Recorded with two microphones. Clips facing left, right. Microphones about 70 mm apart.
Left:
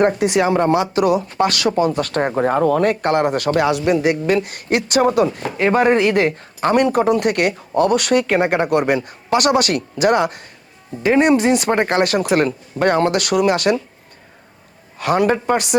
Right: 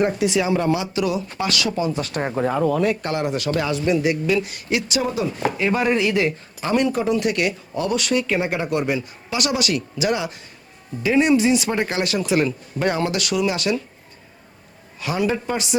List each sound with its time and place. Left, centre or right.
0.0 s speech: left
14.9 s speech: left